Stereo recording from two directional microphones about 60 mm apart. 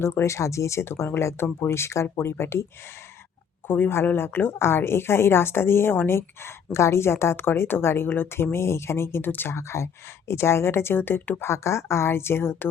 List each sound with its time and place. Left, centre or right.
0.0 s a woman's voice: left
3.7 s a woman's voice: left
9.5 s a woman's voice: left